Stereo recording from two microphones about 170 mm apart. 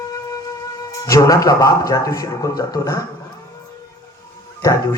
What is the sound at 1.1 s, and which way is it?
A man's voice, 20° left (ahead or behind).